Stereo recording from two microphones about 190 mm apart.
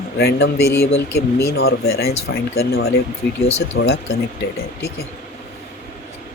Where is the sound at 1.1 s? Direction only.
15° left (ahead or behind).